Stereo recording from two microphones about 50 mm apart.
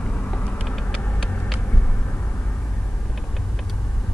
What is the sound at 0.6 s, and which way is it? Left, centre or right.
Vehicle, centre.